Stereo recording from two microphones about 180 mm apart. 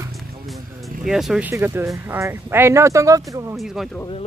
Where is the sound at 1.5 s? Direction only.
15° right (ahead or behind).